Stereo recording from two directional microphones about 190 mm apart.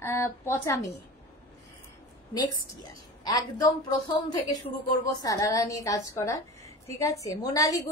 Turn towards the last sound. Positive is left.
turn(degrees=20)  # may be behind; listen again after turning